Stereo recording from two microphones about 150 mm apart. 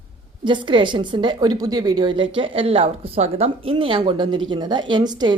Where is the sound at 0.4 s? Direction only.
30° right (ahead or behind).